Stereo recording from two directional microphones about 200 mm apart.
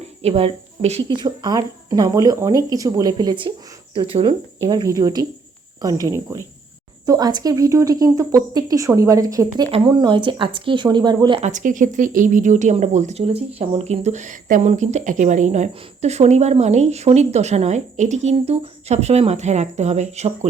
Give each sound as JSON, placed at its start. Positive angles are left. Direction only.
{"t": 0.2, "sound": "speech", "side_deg": -30}
{"t": 11.4, "sound": "speech", "side_deg": -40}